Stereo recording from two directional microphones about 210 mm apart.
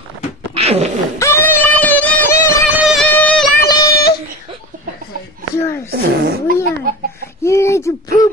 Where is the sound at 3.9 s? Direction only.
45° left (ahead or behind).